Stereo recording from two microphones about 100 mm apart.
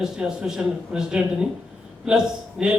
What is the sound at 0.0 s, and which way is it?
A man's voice, 5° right (ahead or behind).